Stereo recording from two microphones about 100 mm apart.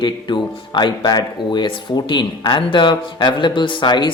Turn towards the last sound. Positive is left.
turn(degrees=50)  # may be behind; listen again after turning